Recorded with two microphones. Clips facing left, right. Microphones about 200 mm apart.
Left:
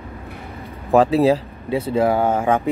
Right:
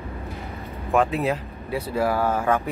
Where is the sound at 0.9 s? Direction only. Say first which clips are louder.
Left 7 dB; 35° left (ahead or behind).